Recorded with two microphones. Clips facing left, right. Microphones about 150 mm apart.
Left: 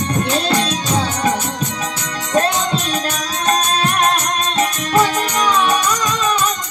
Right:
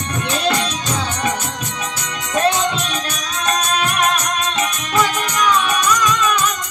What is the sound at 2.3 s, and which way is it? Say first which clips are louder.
Music: left 1 dB; 35° left (ahead or behind).